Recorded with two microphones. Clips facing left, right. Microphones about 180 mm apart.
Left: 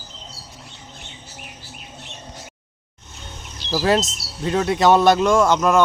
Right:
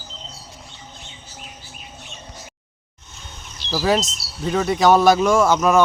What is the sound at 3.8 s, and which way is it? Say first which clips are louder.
Speech: left 1 dB; centre (ahead or behind).